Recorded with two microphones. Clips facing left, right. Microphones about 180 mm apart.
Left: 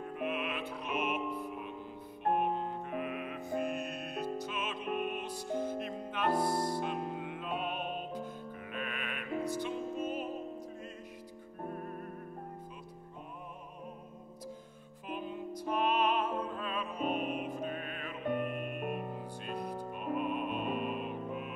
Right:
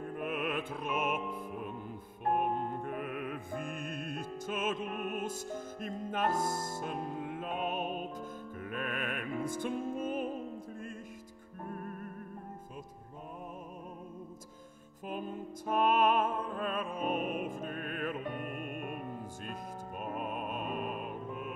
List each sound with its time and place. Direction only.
0.0 s music: 50° right (ahead or behind)
15.0 s music: 45° right (ahead or behind)